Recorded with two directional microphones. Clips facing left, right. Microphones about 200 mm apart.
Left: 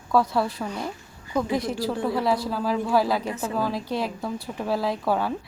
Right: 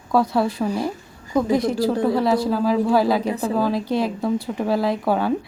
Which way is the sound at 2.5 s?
Centre (ahead or behind).